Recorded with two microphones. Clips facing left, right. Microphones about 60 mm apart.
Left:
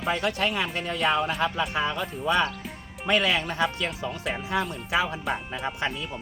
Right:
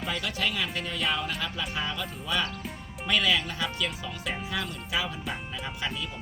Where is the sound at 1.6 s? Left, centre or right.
Left.